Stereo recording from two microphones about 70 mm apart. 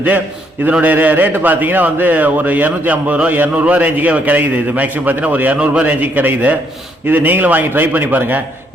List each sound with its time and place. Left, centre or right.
0.7 s a man's voice: right